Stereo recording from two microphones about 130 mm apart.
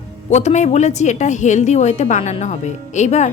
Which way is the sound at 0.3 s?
65° left (ahead or behind).